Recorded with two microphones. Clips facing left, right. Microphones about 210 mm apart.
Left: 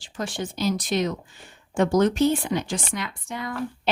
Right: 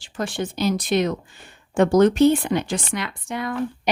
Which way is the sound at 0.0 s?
60° right (ahead or behind).